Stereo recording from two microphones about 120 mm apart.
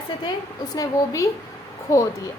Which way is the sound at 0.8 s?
25° left (ahead or behind).